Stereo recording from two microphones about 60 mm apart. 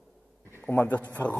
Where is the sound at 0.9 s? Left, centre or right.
Left.